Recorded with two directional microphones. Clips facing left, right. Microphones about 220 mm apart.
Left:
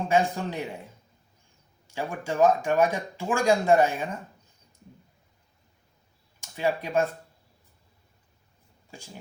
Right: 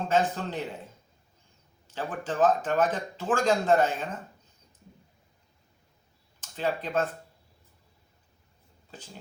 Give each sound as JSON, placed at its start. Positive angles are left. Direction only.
{"t": 0.1, "sound": "speech", "side_deg": 10}
{"t": 1.9, "sound": "speech", "side_deg": 10}
{"t": 6.4, "sound": "speech", "side_deg": 10}
{"t": 8.9, "sound": "speech", "side_deg": 10}